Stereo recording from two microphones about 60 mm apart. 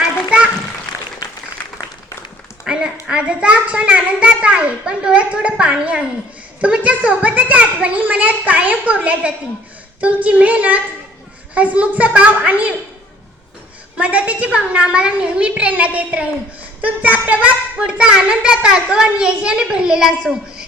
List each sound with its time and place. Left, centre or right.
2.6 s a child's voice: centre
13.9 s a child's voice: right